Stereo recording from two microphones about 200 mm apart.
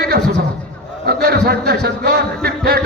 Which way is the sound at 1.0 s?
50° right (ahead or behind).